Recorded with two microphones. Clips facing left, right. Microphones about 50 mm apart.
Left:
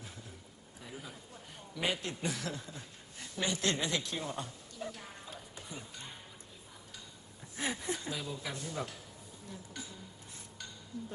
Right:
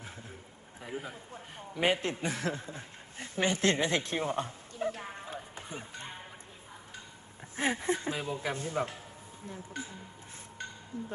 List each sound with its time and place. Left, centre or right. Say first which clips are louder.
0.8 s a man's voice: right 7 dB; right
7.5 s a man's voice: right 6 dB; right